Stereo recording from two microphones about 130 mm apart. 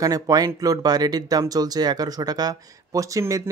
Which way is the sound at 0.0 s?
30° right (ahead or behind).